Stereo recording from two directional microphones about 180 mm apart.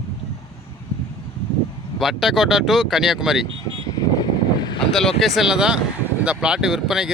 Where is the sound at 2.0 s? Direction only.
Centre (ahead or behind).